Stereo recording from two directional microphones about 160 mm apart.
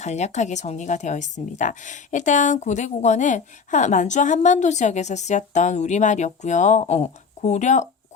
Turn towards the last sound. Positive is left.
turn(degrees=50)  # may be behind; listen again after turning